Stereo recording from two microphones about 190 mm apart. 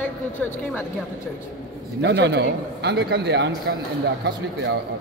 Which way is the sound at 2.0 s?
65° right (ahead or behind).